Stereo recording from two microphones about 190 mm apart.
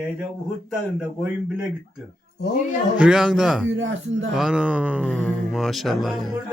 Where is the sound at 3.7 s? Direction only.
90° right.